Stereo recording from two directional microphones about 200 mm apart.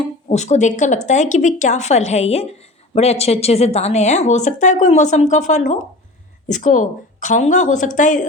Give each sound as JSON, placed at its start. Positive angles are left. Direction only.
{"t": 0.0, "sound": "speech", "side_deg": 35}